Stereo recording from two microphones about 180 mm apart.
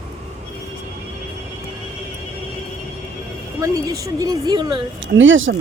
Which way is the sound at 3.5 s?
15° right (ahead or behind).